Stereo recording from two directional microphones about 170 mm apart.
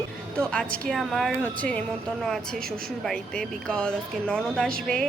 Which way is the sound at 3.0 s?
5° left (ahead or behind).